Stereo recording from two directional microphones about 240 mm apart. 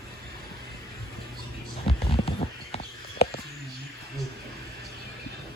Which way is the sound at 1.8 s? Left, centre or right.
Left.